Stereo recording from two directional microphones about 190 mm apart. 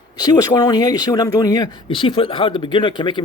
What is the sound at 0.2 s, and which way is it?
Speech, 20° left (ahead or behind).